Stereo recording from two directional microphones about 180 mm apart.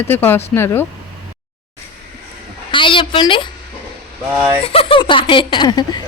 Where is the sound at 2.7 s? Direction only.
25° left (ahead or behind).